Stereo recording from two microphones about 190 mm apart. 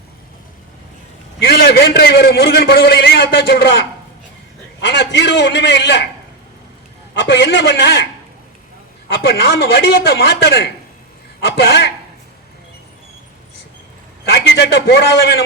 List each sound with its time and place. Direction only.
1.4 s a man's voice: 55° left (ahead or behind)
4.8 s a man's voice: 65° left (ahead or behind)
7.1 s a man's voice: 70° left (ahead or behind)
9.2 s a man's voice: 55° left (ahead or behind)
14.3 s a man's voice: 60° left (ahead or behind)